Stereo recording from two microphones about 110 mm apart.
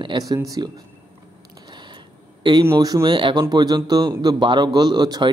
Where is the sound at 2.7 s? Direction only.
35° right (ahead or behind).